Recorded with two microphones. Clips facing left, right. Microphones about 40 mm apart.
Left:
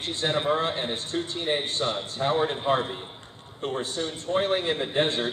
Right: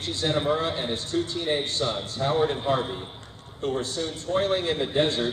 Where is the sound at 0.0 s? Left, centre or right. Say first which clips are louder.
Right 1 dB; left.